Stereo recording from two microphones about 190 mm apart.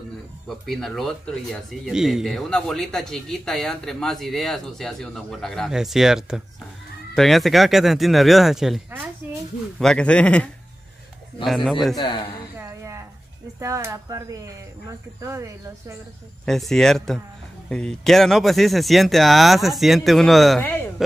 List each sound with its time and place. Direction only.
0.5 s speech: centre (ahead or behind)
9.2 s a sound: 10° right (ahead or behind)
9.8 s speech: 5° left (ahead or behind)
12.0 s speech: 25° left (ahead or behind)
12.5 s a sound: 15° right (ahead or behind)
13.6 s speech: 15° right (ahead or behind)
16.4 s speech: centre (ahead or behind)